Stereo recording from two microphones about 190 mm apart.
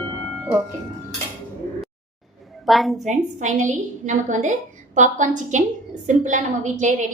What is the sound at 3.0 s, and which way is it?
A woman's voice, 40° right (ahead or behind).